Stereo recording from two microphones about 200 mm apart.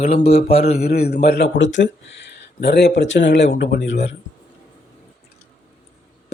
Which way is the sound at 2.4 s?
60° left (ahead or behind).